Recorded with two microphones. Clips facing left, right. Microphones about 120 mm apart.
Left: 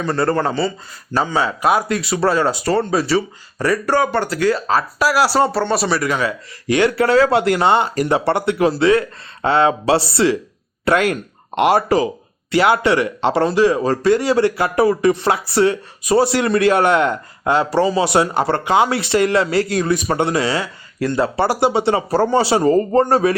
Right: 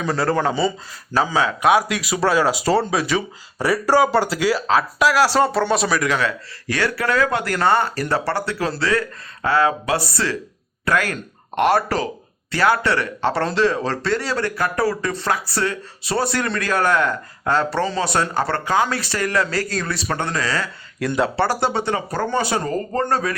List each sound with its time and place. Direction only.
0.0 s speech: 5° right (ahead or behind)
3.6 s speech: 10° right (ahead or behind)
4.6 s speech: centre (ahead or behind); by 20.7 s 20° left (ahead or behind)
21.0 s speech: centre (ahead or behind)
21.6 s speech: 20° left (ahead or behind)
21.9 s speech: 30° left (ahead or behind)
22.4 s speech: 20° left (ahead or behind)